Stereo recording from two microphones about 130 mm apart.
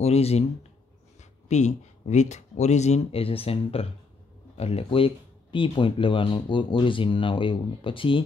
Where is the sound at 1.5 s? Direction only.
60° left (ahead or behind).